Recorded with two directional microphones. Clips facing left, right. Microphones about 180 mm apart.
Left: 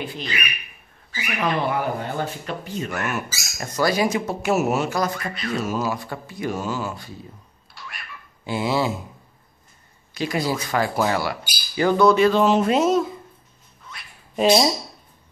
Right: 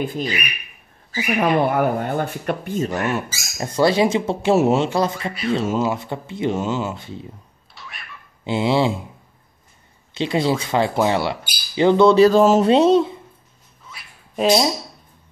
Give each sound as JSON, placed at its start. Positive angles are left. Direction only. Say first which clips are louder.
{"t": 1.1, "sound": "speech", "louder": "right 6 dB", "side_deg": -50}
{"t": 2.9, "sound": "speech", "louder": "right 4 dB", "side_deg": -30}
{"t": 7.7, "sound": "cat", "louder": "even", "side_deg": 0}
{"t": 8.5, "sound": "speech", "louder": "right 4 dB", "side_deg": -25}
{"t": 10.1, "sound": "speech", "louder": "right 4 dB", "side_deg": -25}
{"t": 12.3, "sound": "speech", "louder": "right 4 dB", "side_deg": -40}
{"t": 12.6, "sound": "speech", "louder": "right 5 dB", "side_deg": -30}
{"t": 13.8, "sound": "cat", "louder": "even", "side_deg": -5}